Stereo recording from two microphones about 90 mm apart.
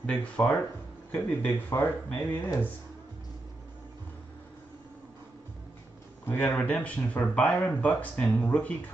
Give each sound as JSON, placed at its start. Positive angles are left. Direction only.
{"t": 0.0, "sound": "speech", "side_deg": 10}
{"t": 1.1, "sound": "speech", "side_deg": 25}
{"t": 6.2, "sound": "speech", "side_deg": 20}